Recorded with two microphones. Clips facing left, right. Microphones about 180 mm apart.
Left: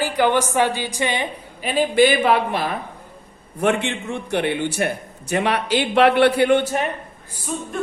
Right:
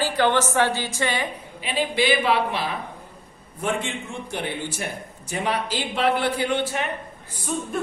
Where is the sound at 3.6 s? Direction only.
70° left (ahead or behind).